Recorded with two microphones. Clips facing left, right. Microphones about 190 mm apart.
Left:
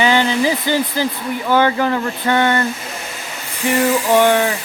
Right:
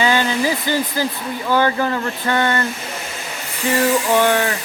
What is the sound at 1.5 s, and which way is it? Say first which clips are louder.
Speech: left 2 dB; 15° left (ahead or behind).